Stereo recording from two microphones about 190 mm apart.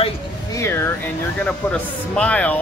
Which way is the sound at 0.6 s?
10° left (ahead or behind).